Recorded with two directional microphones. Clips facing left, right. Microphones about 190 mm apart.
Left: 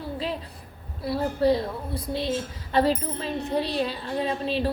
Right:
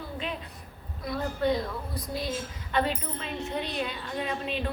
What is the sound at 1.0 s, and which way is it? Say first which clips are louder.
A child's voice: left 5 dB; 35° left (ahead or behind).